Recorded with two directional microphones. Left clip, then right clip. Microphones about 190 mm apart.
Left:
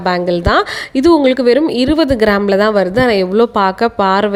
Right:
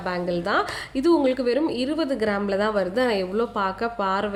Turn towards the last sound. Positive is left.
turn(degrees=45)  # may be behind; listen again after turning